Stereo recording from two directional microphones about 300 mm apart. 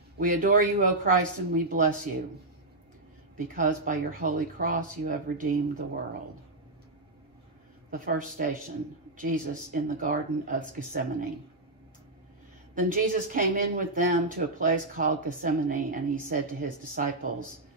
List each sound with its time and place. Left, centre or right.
0.2 s a woman's voice: right
3.3 s a woman's voice: right
7.9 s a woman's voice: right
12.7 s a woman's voice: right